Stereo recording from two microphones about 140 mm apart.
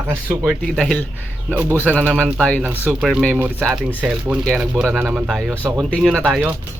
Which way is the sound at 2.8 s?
5° right (ahead or behind).